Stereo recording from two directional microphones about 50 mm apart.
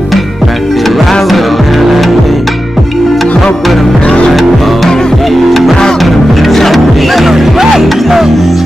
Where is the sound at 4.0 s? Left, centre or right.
Centre.